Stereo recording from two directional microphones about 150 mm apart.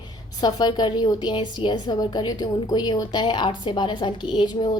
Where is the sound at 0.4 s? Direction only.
30° left (ahead or behind).